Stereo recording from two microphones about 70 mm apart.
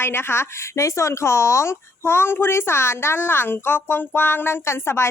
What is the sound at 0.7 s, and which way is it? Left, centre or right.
Speech, left.